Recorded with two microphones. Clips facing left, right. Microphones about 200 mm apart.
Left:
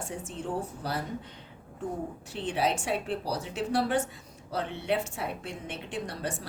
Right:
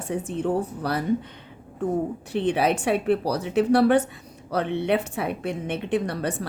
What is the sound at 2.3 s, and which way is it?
A woman's voice, 65° right (ahead or behind).